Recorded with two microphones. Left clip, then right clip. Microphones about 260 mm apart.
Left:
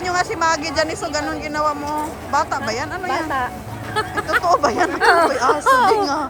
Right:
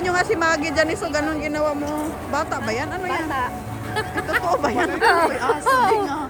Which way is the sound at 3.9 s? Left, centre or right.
Left.